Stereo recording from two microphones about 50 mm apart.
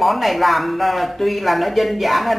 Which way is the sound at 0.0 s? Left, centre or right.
Centre.